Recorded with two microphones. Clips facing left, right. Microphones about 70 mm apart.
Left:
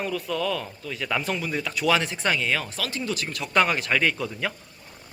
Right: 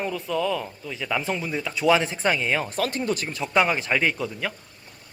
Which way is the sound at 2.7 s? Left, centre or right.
Right.